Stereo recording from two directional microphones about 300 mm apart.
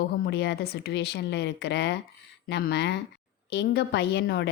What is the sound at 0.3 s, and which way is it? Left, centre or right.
A woman's voice, left.